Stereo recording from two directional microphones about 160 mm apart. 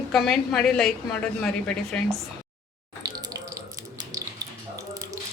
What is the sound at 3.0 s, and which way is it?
Water tap, 25° right (ahead or behind).